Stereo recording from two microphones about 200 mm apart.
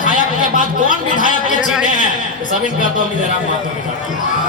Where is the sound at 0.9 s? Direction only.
40° left (ahead or behind).